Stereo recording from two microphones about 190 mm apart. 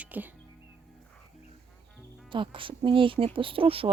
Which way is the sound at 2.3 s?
25° right (ahead or behind).